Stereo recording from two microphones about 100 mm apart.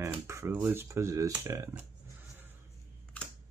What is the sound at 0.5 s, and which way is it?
Speech, 20° right (ahead or behind).